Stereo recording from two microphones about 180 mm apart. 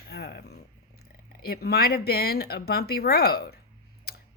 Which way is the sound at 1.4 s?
60° left (ahead or behind).